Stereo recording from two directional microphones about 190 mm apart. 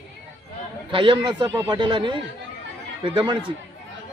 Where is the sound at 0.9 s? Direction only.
25° right (ahead or behind).